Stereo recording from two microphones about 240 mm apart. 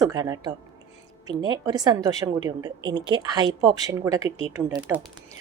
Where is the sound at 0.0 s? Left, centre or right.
Centre.